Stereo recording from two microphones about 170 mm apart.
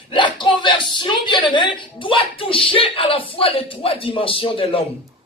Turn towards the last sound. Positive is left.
turn(degrees=35)  # may be behind; listen again after turning